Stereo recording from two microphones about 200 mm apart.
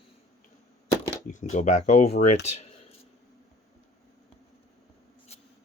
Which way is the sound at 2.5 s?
30° left (ahead or behind).